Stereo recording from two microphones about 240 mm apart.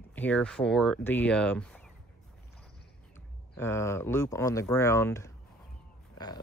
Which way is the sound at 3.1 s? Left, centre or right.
Centre.